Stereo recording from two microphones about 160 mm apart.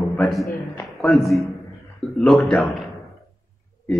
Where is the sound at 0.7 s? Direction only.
5° left (ahead or behind).